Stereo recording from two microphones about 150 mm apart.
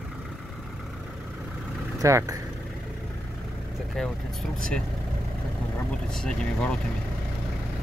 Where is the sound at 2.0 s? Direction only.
20° right (ahead or behind).